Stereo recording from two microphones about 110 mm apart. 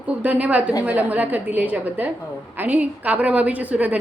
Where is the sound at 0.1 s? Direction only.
15° right (ahead or behind).